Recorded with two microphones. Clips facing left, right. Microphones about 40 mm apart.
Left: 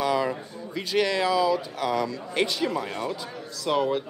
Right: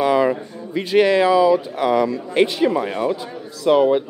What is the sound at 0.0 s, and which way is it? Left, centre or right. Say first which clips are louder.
Speech: right 8 dB; right.